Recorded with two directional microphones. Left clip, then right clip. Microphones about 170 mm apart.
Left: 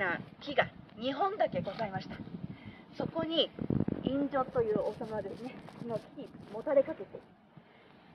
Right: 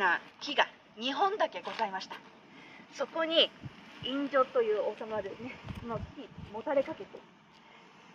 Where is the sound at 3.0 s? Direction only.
75° left (ahead or behind).